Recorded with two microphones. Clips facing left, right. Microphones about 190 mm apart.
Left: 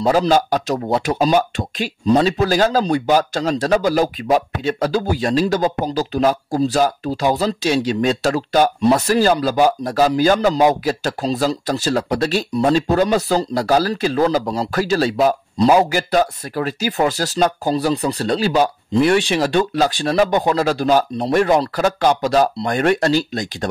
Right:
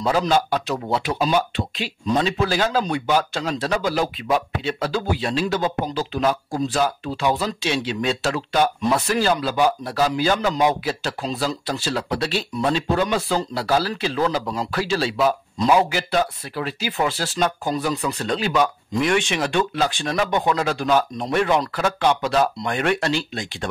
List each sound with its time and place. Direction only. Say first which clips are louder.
0.0 s speech: left 4 dB; 40° left (ahead or behind)